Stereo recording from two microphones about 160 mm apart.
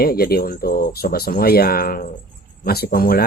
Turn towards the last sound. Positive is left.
turn(degrees=70)  # may be behind; listen again after turning